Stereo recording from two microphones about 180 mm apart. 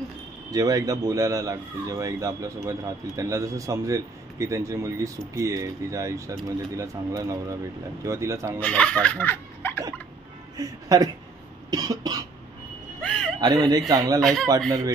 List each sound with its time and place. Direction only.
0.5 s a man's voice: 20° right (ahead or behind)
8.5 s speech: 5° left (ahead or behind)
10.6 s speech: 20° right (ahead or behind)
13.0 s a sound: 5° left (ahead or behind)
13.4 s speech: 20° right (ahead or behind)
14.2 s speech: centre (ahead or behind)